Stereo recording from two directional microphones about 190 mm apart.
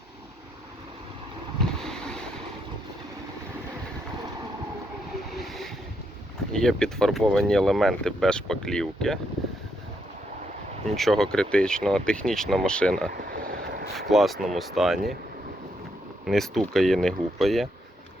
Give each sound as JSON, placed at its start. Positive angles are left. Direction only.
{"t": 1.8, "sound": "boat", "side_deg": 5}
{"t": 5.4, "sound": "boat", "side_deg": 0}
{"t": 6.5, "sound": "speech", "side_deg": 5}
{"t": 10.9, "sound": "speech", "side_deg": 0}
{"t": 13.3, "sound": "vehicle", "side_deg": -50}
{"t": 13.9, "sound": "speech", "side_deg": 0}
{"t": 16.2, "sound": "speech", "side_deg": 0}